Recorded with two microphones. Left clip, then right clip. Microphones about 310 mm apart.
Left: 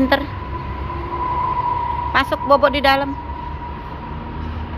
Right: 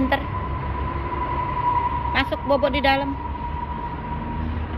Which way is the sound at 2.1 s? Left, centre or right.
Centre.